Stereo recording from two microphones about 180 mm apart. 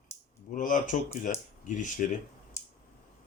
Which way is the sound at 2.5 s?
15° left (ahead or behind).